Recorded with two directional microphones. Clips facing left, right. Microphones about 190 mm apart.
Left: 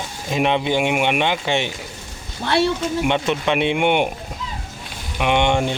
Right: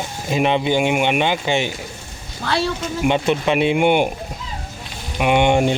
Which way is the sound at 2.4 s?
25° left (ahead or behind).